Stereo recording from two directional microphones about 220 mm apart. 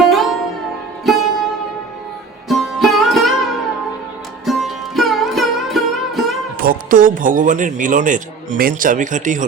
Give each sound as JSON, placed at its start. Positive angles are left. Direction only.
{"t": 0.1, "sound": "sitar", "side_deg": 0}
{"t": 1.1, "sound": "music", "side_deg": 0}
{"t": 2.5, "sound": "music", "side_deg": 0}
{"t": 6.6, "sound": "a man's voice", "side_deg": -40}